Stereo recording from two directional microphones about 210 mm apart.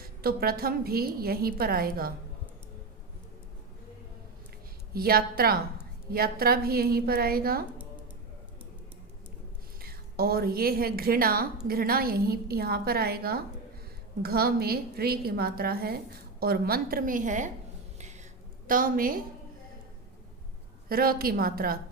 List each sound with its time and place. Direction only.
0.2 s a woman's voice: 45° right (ahead or behind)
4.9 s a woman's voice: 45° right (ahead or behind)
9.8 s a woman's voice: 45° right (ahead or behind)
18.7 s a woman's voice: 40° right (ahead or behind)
20.9 s a woman's voice: 45° right (ahead or behind)